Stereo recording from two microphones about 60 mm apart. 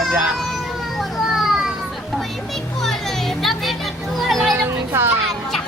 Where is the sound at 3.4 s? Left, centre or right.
Centre.